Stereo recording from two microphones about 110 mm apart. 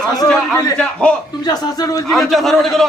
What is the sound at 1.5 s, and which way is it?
Speech, 35° left (ahead or behind).